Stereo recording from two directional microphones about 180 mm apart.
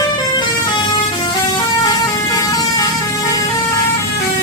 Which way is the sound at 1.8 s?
20° left (ahead or behind).